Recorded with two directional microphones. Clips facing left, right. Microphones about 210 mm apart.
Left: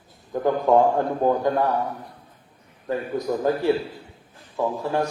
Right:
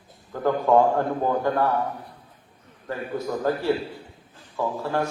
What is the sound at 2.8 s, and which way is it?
A man's voice, 15° left (ahead or behind).